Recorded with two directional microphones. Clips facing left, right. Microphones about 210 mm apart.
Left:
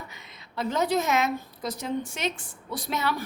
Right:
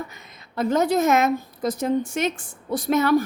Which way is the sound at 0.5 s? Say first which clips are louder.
Right 5 dB; 50° right (ahead or behind).